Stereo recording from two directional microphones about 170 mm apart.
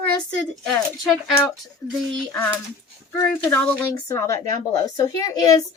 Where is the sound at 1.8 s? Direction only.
20° left (ahead or behind).